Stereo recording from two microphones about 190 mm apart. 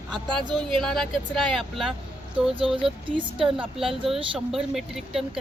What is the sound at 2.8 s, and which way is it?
Speech, 25° right (ahead or behind).